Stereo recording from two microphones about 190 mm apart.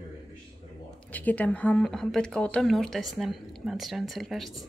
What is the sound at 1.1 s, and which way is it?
Speech, 10° left (ahead or behind).